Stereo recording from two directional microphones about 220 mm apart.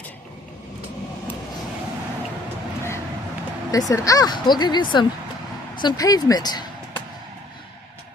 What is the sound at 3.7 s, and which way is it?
Speech, 15° left (ahead or behind).